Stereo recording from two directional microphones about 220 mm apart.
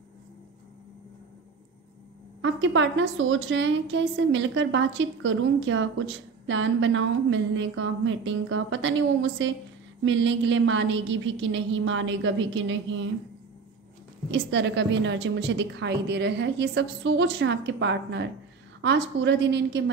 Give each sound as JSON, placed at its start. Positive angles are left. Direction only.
{"t": 2.4, "sound": "a woman's voice", "side_deg": -60}
{"t": 14.3, "sound": "a woman's voice", "side_deg": -55}